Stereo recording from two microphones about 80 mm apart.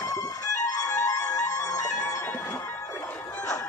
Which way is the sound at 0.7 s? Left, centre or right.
Left.